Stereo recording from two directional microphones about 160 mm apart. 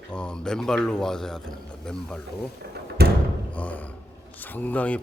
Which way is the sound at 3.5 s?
10° left (ahead or behind).